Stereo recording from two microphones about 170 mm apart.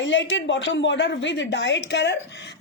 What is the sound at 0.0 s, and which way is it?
A woman's voice, 90° left.